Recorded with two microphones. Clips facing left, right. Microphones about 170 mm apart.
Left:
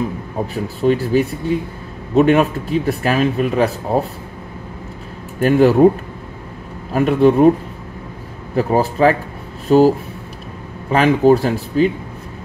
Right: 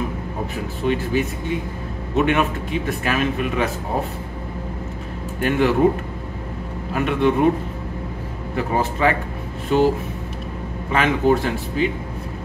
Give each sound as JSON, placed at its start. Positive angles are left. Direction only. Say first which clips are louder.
{"t": 0.8, "sound": "speech", "louder": "left 6 dB", "side_deg": 40}
{"t": 5.4, "sound": "speech", "louder": "left 7 dB", "side_deg": 40}
{"t": 6.9, "sound": "speech", "louder": "left 6 dB", "side_deg": 35}
{"t": 8.5, "sound": "speech", "louder": "left 6 dB", "side_deg": 35}
{"t": 10.9, "sound": "speech", "louder": "left 6 dB", "side_deg": 35}